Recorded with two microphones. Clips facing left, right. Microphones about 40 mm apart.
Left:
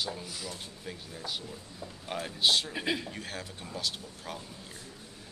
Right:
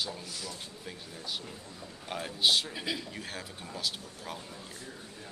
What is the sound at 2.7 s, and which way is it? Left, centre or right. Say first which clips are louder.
Speech: left 4 dB; left.